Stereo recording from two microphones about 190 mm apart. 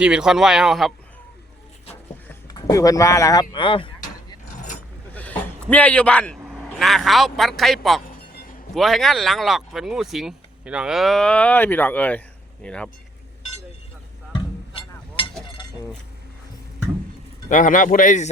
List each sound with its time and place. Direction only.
0.0 s speech: 5° right (ahead or behind)
2.5 s speech: 20° left (ahead or behind)
5.1 s a sound: 10° left (ahead or behind)
6.4 s a man's voice: centre (ahead or behind)
17.5 s speech: 45° left (ahead or behind)